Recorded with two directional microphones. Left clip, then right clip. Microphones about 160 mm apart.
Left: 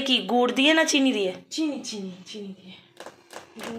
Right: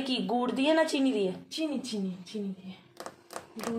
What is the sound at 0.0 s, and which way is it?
Speech, 5° left (ahead or behind).